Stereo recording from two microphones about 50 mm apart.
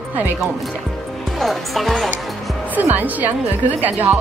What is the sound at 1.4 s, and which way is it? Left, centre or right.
Speech, centre.